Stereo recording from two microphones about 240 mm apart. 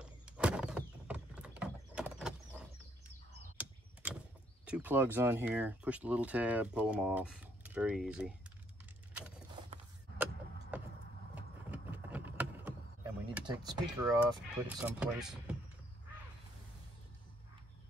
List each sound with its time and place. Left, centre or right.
0.0 s a sound: centre
4.6 s speech: centre
10.1 s vehicle: centre
13.5 s speech: centre
14.8 s speech: centre